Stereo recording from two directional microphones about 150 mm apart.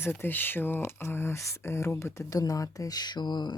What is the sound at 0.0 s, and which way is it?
Speech, 15° left (ahead or behind).